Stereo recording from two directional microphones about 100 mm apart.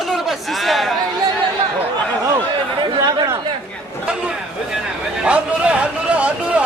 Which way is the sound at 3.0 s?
45° right (ahead or behind).